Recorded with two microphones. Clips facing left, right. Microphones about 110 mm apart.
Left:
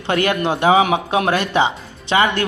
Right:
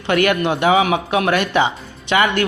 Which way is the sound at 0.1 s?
30° left (ahead or behind).